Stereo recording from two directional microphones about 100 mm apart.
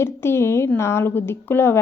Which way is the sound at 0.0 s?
25° left (ahead or behind).